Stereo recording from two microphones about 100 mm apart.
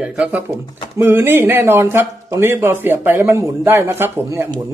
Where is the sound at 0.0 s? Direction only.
10° right (ahead or behind).